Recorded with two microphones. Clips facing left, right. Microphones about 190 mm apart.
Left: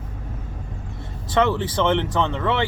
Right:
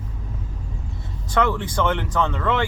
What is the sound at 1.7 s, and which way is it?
Speech, 20° left (ahead or behind).